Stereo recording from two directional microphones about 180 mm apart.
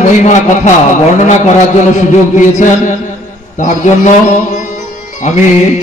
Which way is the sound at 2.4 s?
45° left (ahead or behind).